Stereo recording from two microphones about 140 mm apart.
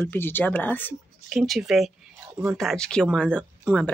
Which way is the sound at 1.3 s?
Centre (ahead or behind).